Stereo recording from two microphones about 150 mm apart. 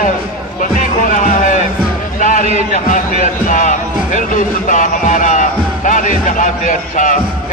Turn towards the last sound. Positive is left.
turn(degrees=60)  # may be behind; listen again after turning